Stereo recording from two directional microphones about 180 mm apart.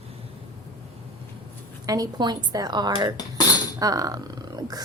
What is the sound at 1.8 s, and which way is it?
Speech, 20° right (ahead or behind).